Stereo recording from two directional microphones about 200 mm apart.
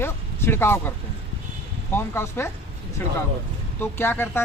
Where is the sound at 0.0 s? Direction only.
10° left (ahead or behind).